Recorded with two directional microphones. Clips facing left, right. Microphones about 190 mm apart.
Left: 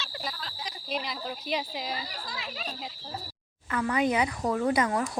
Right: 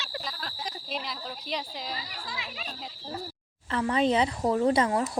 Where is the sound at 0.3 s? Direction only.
50° right (ahead or behind).